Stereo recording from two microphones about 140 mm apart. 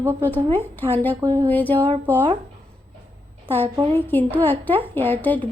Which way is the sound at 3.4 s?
15° left (ahead or behind).